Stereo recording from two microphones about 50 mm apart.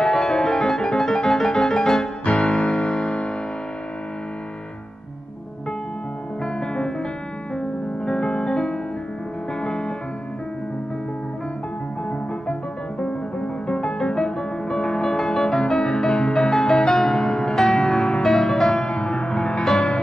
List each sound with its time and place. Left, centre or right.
0.0 s music: centre
6.4 s music: centre
13.0 s music: centre
18.2 s music: centre